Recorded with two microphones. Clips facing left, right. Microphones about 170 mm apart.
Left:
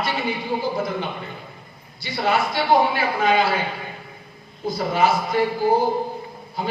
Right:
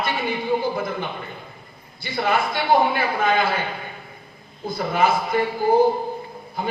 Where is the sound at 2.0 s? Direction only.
50° right (ahead or behind).